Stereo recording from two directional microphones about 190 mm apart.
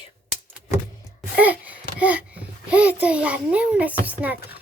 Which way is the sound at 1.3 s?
10° right (ahead or behind).